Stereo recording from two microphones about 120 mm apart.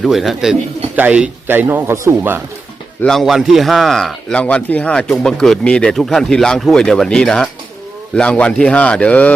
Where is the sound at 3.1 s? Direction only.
Centre (ahead or behind).